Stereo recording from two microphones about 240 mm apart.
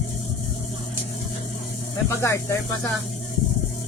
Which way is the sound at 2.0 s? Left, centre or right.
Centre.